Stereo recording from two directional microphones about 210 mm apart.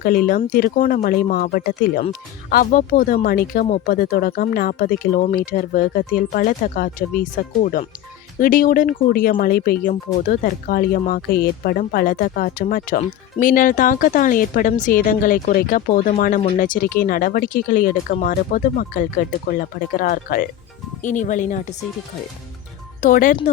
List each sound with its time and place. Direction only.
0.0 s speech: 45° left (ahead or behind)
23.0 s speech: 40° left (ahead or behind)